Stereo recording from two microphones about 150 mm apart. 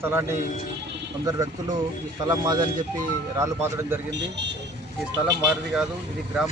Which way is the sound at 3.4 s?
15° right (ahead or behind).